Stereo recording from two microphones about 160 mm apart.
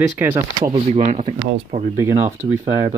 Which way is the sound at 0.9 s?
45° right (ahead or behind).